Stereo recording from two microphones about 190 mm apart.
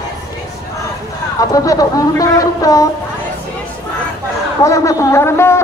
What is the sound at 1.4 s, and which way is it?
Speech, 20° left (ahead or behind).